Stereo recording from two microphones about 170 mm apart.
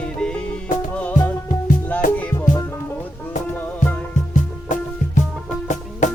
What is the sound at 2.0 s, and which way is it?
Music, 50° left (ahead or behind).